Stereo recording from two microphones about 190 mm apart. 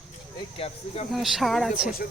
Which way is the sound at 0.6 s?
30° left (ahead or behind).